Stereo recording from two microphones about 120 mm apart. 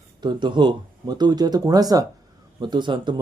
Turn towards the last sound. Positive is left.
turn(degrees=-40)  # may be behind; listen again after turning